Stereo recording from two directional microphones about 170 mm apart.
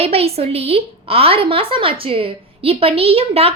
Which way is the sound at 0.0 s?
35° right (ahead or behind).